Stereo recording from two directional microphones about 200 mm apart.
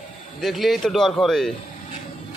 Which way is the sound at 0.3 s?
Centre (ahead or behind).